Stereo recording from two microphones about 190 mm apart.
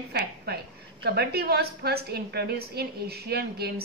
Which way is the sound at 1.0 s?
60° right (ahead or behind).